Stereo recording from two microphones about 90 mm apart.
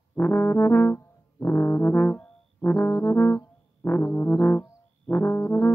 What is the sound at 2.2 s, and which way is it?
Brass instrument, 20° left (ahead or behind).